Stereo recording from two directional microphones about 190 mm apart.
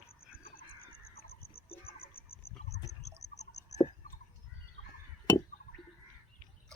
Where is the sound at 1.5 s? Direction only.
30° left (ahead or behind).